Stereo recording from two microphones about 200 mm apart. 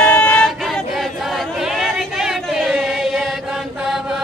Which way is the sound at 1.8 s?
Centre (ahead or behind).